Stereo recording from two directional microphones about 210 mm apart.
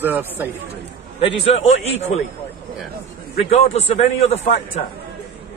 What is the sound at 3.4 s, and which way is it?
A man's voice, 30° left (ahead or behind).